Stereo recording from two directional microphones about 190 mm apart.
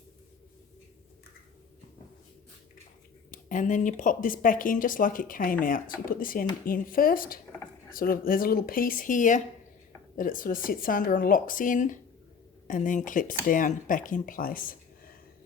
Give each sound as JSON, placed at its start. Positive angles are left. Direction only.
{"t": 3.3, "sound": "speech", "side_deg": 45}